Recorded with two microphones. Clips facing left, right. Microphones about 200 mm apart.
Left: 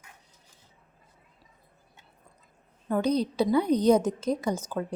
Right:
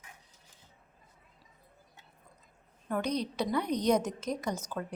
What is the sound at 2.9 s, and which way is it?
Speech, 25° left (ahead or behind).